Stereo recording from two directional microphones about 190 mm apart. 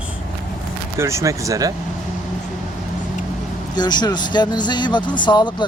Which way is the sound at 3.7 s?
20° left (ahead or behind).